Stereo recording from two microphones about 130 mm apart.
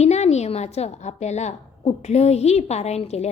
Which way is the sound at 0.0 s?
60° left (ahead or behind).